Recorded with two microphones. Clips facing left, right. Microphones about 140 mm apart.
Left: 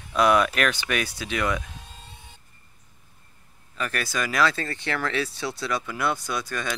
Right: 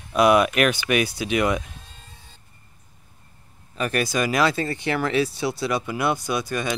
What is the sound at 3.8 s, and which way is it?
Speech, 15° right (ahead or behind).